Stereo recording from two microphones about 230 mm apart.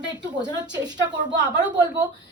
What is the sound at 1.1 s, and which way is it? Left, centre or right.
Speech, right.